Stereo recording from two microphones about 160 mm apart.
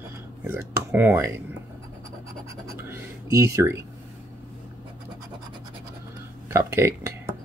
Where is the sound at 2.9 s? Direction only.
20° right (ahead or behind).